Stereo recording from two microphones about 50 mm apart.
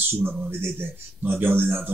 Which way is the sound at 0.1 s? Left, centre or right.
Right.